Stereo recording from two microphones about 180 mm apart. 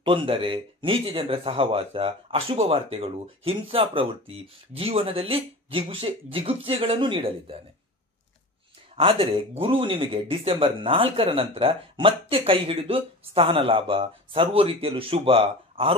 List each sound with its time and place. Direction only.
0.0 s speech: 30° right (ahead or behind)
8.9 s speech: 30° right (ahead or behind)